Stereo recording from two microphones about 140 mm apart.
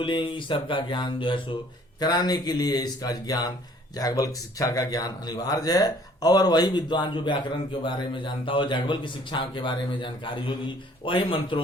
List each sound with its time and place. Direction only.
0.0 s a man's voice: 35° left (ahead or behind)